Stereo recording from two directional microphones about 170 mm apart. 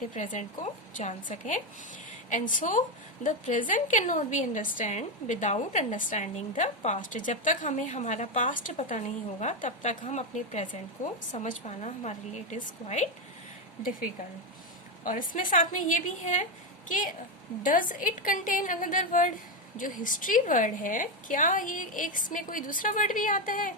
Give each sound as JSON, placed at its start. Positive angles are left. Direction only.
{"t": 0.1, "sound": "a woman's voice", "side_deg": 45}
{"t": 15.0, "sound": "a woman's voice", "side_deg": 50}
{"t": 17.6, "sound": "a woman's voice", "side_deg": 50}